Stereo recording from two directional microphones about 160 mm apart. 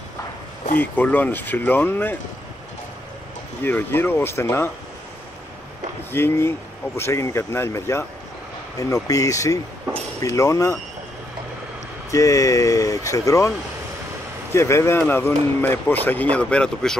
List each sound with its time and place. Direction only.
0.7 s speech: 10° left (ahead or behind)
3.6 s speech: 15° left (ahead or behind)
6.1 s speech: 15° left (ahead or behind)
12.1 s speech: 20° left (ahead or behind)
14.5 s speech: 15° left (ahead or behind)